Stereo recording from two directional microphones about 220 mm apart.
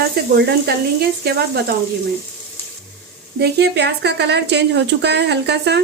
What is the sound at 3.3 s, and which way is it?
Speech, 50° right (ahead or behind).